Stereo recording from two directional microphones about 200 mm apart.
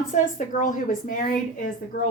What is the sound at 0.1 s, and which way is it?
A woman's voice, 40° left (ahead or behind).